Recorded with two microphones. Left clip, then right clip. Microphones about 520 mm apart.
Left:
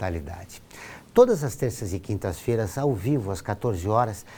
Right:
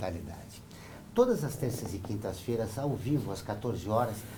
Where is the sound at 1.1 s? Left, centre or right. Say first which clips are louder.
Left 9 dB; left.